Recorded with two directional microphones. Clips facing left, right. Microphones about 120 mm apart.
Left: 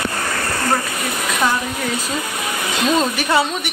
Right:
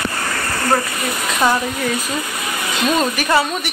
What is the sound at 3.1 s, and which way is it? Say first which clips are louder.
Speech: right 1 dB; 15° left (ahead or behind).